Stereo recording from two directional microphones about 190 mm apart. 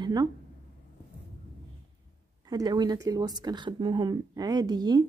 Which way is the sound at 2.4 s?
20° right (ahead or behind).